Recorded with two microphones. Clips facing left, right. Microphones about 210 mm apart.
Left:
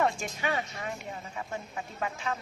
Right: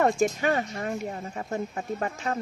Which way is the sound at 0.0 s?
45° right (ahead or behind).